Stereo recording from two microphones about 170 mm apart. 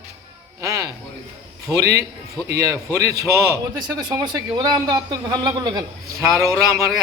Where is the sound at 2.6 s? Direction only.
20° right (ahead or behind).